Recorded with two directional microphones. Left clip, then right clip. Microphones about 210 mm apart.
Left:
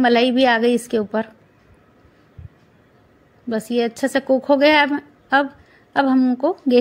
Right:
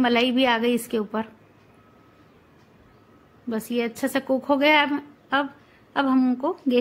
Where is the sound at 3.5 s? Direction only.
10° left (ahead or behind).